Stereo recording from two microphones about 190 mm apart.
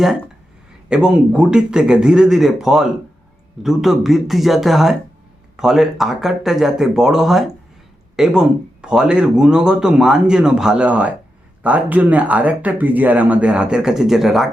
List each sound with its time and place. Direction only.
0.9 s a man's voice: 5° right (ahead or behind)